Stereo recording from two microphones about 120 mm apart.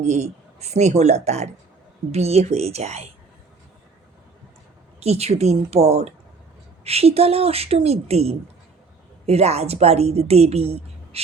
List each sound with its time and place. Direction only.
0.0 s a woman's voice: 65° right (ahead or behind)
4.9 s a woman's voice: 60° right (ahead or behind)